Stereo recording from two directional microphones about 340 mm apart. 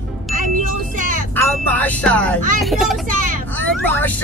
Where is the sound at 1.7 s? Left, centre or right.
Centre.